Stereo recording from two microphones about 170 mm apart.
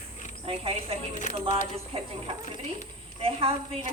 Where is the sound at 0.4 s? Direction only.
35° right (ahead or behind).